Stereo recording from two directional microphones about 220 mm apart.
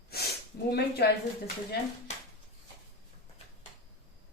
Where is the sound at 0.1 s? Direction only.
45° left (ahead or behind).